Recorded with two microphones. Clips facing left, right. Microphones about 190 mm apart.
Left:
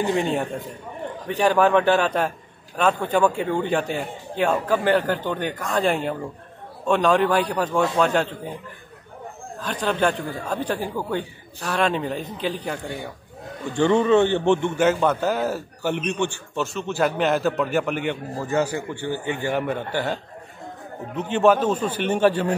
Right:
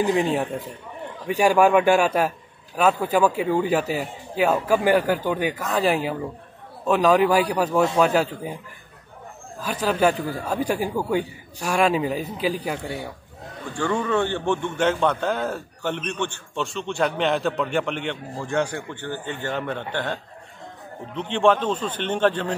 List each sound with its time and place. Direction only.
0.0 s a man's voice: 5° right (ahead or behind)
9.6 s a man's voice: 5° right (ahead or behind)
13.7 s a man's voice: 20° left (ahead or behind)
14.8 s a man's voice: 5° left (ahead or behind)
21.2 s a man's voice: 5° left (ahead or behind)